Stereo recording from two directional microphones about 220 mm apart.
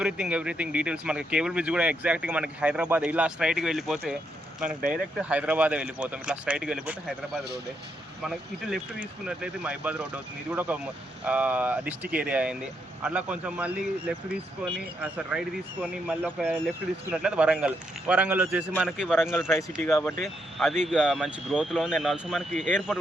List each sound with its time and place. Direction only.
0.0 s speech: 5° right (ahead or behind)
4.8 s speech: 40° right (ahead or behind)
5.1 s speech: 5° right (ahead or behind)
8.2 s speech: centre (ahead or behind)
19.8 s speech: 10° left (ahead or behind)
20.8 s speech: centre (ahead or behind)